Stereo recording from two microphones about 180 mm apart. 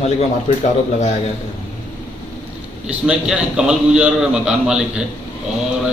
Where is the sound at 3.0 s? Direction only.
5° right (ahead or behind).